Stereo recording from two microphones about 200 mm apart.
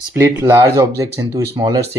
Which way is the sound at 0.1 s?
10° right (ahead or behind).